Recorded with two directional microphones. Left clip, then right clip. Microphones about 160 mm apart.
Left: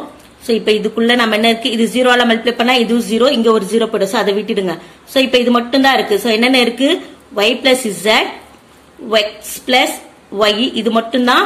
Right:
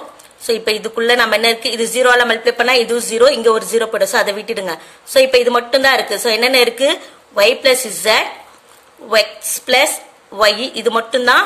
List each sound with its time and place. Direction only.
0.5 s a woman's voice: 45° right (ahead or behind)
10.3 s a woman's voice: 50° right (ahead or behind)